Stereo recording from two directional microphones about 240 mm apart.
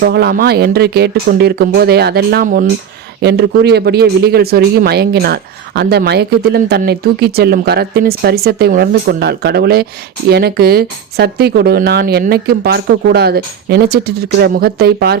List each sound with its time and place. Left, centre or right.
0.0 s speech: right